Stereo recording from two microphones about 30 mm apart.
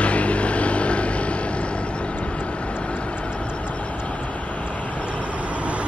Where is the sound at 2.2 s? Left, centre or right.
Left.